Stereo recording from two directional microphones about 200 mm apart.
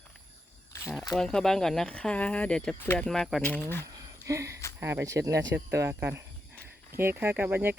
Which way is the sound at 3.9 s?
15° right (ahead or behind).